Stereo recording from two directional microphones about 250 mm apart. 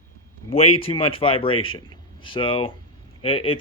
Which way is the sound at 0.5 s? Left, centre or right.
Left.